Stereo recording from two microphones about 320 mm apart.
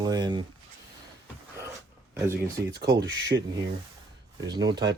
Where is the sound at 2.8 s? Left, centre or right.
Right.